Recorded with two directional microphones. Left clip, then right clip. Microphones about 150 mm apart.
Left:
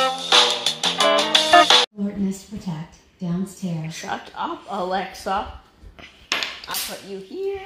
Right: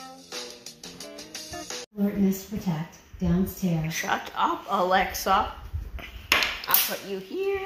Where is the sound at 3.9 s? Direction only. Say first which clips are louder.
Right 2 dB; 65° left (ahead or behind).